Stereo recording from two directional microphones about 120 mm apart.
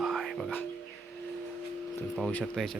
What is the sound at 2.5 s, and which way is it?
Speech, 5° left (ahead or behind).